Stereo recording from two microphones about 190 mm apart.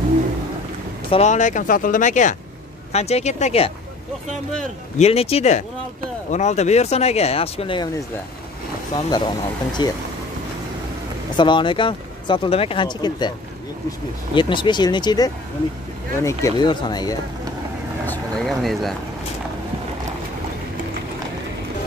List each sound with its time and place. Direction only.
1.1 s speech: 40° left (ahead or behind)
4.9 s speech: 35° left (ahead or behind)
8.9 s speech: 25° left (ahead or behind)
11.3 s speech: 25° left (ahead or behind)
14.3 s speech: 25° left (ahead or behind)
18.0 s speech: 5° left (ahead or behind)